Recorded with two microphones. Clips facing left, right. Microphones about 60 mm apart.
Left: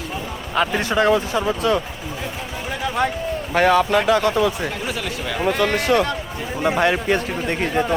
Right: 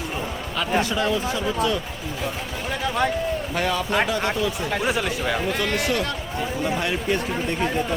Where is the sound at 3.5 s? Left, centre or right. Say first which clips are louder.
Left 10 dB; left.